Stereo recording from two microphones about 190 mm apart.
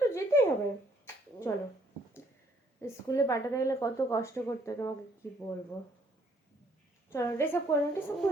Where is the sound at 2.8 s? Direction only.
15° left (ahead or behind).